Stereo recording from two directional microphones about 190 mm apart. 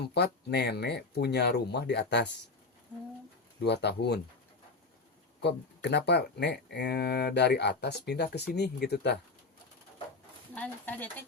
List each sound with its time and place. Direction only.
0.0 s speech: 60° left (ahead or behind)
3.6 s speech: 60° left (ahead or behind)
5.4 s speech: 60° left (ahead or behind)
10.5 s speech: 10° left (ahead or behind)